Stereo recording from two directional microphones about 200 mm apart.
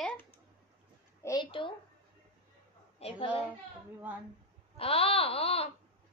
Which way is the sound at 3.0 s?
25° left (ahead or behind).